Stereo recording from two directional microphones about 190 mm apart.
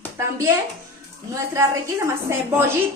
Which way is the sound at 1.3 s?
15° right (ahead or behind).